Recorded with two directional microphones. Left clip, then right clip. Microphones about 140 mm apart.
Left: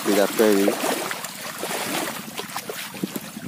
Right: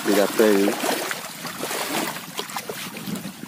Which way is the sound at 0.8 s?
35° right (ahead or behind).